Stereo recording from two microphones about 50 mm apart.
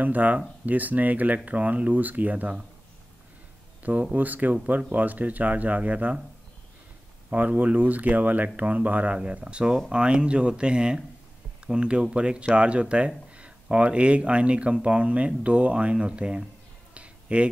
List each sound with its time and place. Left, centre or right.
0.0 s speech: right
4.1 s speech: right
7.2 s speech: right
16.9 s a sound: right